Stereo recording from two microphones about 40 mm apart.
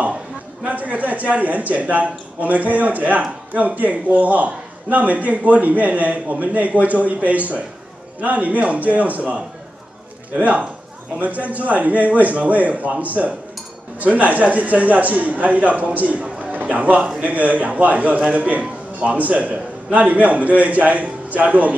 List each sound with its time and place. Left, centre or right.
0.7 s a man's voice: right